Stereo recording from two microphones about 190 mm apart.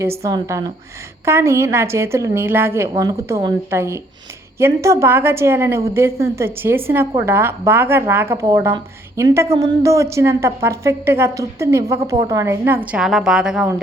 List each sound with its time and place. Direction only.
0.3 s a woman's voice: 15° right (ahead or behind)